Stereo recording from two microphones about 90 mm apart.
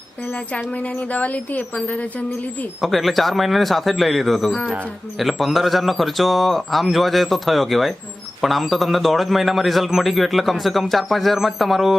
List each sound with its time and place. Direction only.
0.5 s a woman's voice: 15° left (ahead or behind)
2.8 s a man's voice: centre (ahead or behind)